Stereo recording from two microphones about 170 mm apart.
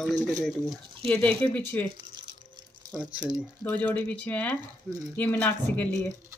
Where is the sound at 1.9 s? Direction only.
25° right (ahead or behind).